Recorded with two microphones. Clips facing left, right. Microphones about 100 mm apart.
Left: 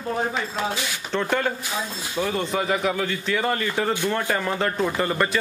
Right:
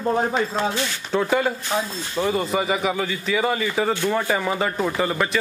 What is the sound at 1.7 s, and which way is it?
Speech, 45° right (ahead or behind).